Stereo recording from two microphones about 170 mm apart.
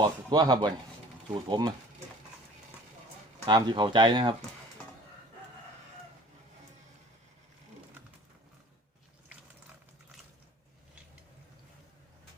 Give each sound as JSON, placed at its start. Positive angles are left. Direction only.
{"t": 0.3, "sound": "speech", "side_deg": -25}
{"t": 3.4, "sound": "speech", "side_deg": -25}